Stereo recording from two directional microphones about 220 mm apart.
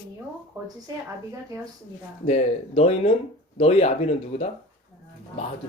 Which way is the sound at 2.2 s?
30° left (ahead or behind).